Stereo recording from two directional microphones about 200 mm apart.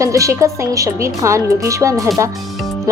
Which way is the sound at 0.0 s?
15° right (ahead or behind).